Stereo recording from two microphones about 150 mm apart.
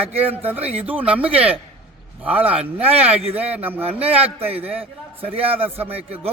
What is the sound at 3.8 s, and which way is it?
Speech, 40° right (ahead or behind).